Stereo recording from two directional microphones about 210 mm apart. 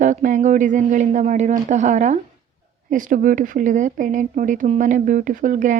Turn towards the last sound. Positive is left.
turn(degrees=-40)  # may be behind; listen again after turning